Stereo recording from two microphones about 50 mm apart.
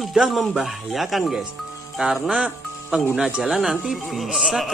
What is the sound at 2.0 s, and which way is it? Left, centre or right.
Speech, centre.